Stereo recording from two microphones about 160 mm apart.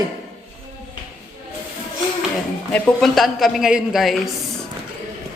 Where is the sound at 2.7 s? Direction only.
5° left (ahead or behind).